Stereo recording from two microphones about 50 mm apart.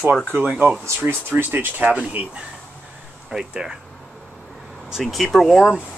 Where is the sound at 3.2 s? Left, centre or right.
Centre.